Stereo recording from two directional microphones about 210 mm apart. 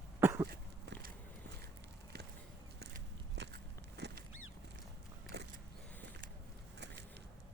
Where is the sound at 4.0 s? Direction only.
55° right (ahead or behind).